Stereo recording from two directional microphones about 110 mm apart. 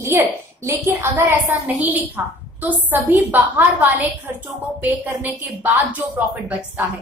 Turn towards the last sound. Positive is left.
turn(degrees=-15)  # may be behind; listen again after turning